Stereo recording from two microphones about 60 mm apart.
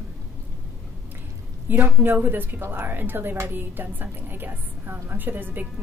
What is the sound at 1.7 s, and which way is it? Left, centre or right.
A woman's voice, right.